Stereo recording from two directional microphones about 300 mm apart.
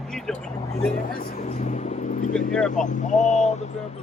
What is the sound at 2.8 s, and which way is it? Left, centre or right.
Speech, left.